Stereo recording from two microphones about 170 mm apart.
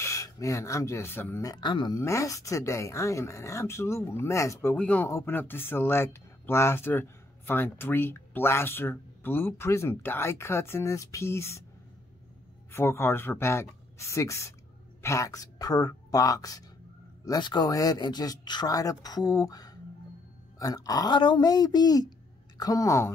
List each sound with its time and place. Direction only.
0.0 s speech: 20° left (ahead or behind)
12.7 s speech: 15° left (ahead or behind)